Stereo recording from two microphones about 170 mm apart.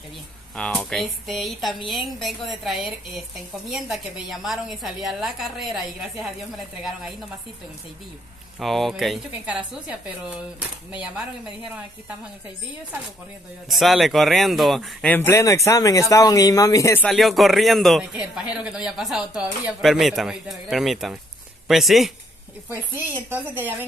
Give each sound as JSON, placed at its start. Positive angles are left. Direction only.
{"t": 0.6, "sound": "a man's voice", "side_deg": 5}
{"t": 8.5, "sound": "a man's voice", "side_deg": 0}
{"t": 10.9, "sound": "a woman's voice", "side_deg": -5}
{"t": 13.7, "sound": "a man's voice", "side_deg": 0}
{"t": 15.1, "sound": "speech", "side_deg": 15}
{"t": 17.0, "sound": "a man's voice", "side_deg": 0}
{"t": 23.3, "sound": "a woman's voice", "side_deg": -10}